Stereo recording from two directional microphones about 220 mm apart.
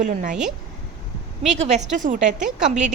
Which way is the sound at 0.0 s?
35° right (ahead or behind).